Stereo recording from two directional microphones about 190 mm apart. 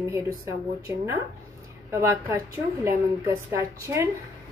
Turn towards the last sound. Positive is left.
turn(degrees=-15)  # may be behind; listen again after turning